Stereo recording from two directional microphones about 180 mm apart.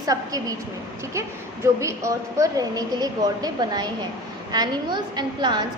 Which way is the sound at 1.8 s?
15° right (ahead or behind).